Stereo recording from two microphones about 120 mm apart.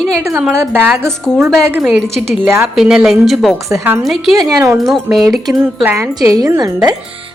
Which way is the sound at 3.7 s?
25° right (ahead or behind).